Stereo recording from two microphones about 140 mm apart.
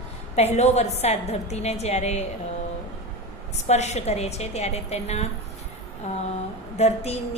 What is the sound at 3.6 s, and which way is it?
A woman's voice, 55° left (ahead or behind).